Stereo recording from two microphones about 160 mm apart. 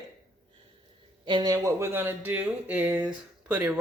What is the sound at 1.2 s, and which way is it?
Speech, 25° right (ahead or behind).